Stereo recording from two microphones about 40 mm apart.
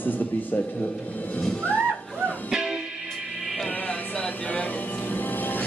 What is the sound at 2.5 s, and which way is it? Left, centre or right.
Music, centre.